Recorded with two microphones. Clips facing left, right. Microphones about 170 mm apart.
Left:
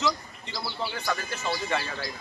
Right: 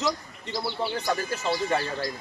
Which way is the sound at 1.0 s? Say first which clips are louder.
Right 3 dB; 35° right (ahead or behind).